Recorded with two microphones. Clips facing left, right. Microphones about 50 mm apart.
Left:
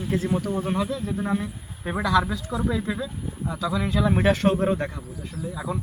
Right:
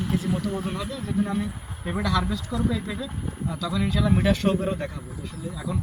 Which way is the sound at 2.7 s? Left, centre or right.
Left.